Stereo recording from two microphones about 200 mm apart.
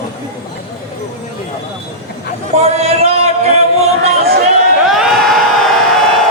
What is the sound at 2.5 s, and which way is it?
Music, 30° right (ahead or behind).